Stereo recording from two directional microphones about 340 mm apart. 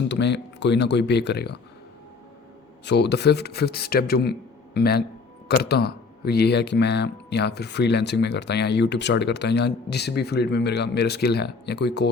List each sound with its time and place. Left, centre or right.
0.1 s speech: left
2.8 s speech: left